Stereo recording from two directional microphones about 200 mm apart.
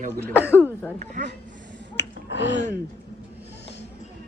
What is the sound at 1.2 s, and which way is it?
Speech, 40° right (ahead or behind).